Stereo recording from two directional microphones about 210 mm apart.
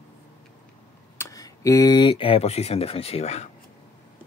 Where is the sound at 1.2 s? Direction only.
15° left (ahead or behind).